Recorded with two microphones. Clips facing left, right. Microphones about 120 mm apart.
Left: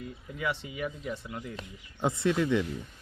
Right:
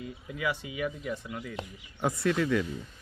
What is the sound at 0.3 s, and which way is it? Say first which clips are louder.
Speech: right 1 dB; 5° right (ahead or behind).